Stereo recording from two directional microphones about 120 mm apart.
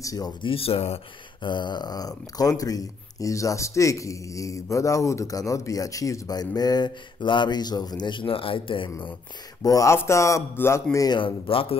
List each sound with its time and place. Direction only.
0.0 s a man's voice: 30° left (ahead or behind)
0.4 s speech: 50° left (ahead or behind)
1.4 s speech: 40° left (ahead or behind)
9.6 s a man's voice: 30° left (ahead or behind)
11.1 s speech: 45° left (ahead or behind)